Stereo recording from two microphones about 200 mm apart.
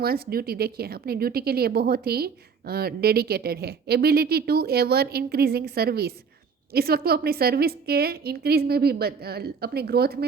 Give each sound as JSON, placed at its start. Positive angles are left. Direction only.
{"t": 0.0, "sound": "speech", "side_deg": -50}